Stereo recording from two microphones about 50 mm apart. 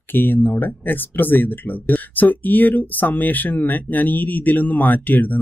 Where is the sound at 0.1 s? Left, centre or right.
Left.